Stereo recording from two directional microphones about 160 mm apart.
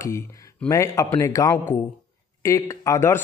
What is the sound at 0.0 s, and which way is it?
Speech, 20° left (ahead or behind).